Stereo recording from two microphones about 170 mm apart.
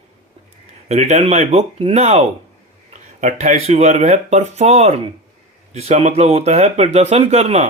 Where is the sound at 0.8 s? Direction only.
40° right (ahead or behind).